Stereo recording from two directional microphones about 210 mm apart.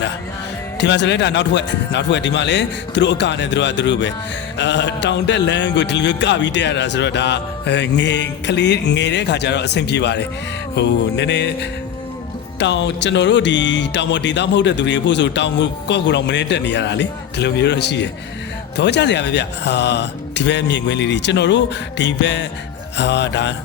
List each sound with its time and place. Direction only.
0.8 s speech: 55° left (ahead or behind)